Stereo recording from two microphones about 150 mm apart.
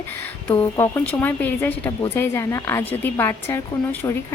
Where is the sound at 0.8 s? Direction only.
10° left (ahead or behind).